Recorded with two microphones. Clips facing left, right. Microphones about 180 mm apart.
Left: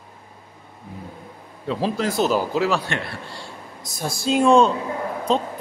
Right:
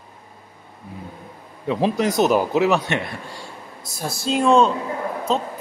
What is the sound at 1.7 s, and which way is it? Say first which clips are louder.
A man's voice: right 3 dB; 20° right (ahead or behind).